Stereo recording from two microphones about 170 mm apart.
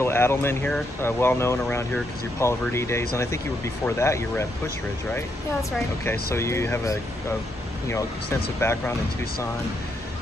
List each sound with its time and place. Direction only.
0.0 s speech: 15° left (ahead or behind)
8.5 s speech: 15° left (ahead or behind)